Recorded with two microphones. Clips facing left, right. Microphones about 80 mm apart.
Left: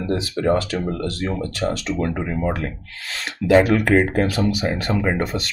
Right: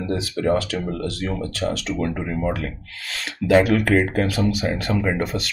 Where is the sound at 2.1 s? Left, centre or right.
Left.